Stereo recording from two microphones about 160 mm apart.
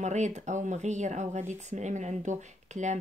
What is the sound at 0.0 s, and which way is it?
Speech, 45° right (ahead or behind).